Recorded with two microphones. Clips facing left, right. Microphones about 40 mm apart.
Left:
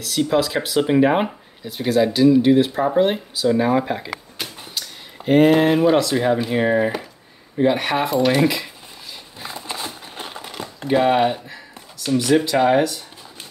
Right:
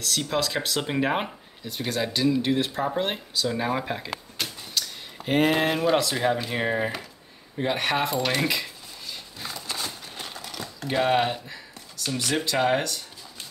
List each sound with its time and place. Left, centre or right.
0.0 s speech: centre
9.5 s a sound: left
10.9 s speech: centre